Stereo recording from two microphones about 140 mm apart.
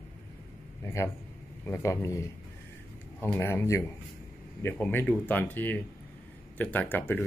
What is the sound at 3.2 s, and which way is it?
Speech, 15° left (ahead or behind).